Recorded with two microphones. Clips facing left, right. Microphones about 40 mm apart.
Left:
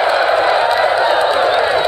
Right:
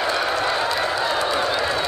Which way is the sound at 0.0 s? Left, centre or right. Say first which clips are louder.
Left 9 dB; left.